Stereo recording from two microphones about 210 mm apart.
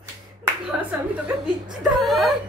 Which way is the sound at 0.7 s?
5° right (ahead or behind).